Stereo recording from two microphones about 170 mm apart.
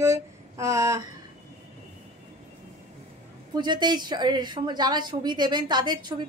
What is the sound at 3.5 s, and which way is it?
Speech, 25° right (ahead or behind).